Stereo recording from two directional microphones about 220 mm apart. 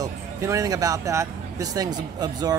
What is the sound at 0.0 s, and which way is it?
Speech, 15° right (ahead or behind).